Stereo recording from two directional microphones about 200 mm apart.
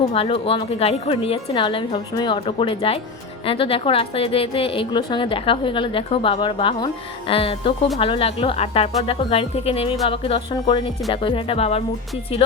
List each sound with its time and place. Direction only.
0.1 s a woman's voice: 30° left (ahead or behind)